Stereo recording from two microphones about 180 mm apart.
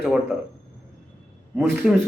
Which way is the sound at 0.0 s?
5° right (ahead or behind).